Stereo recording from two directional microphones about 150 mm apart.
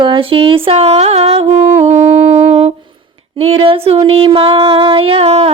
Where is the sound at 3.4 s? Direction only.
40° right (ahead or behind).